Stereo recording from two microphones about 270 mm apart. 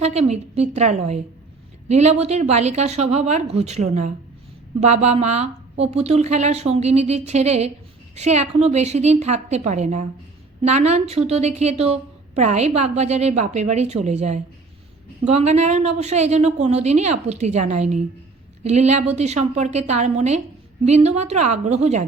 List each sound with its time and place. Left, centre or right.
0.0 s a woman's voice: right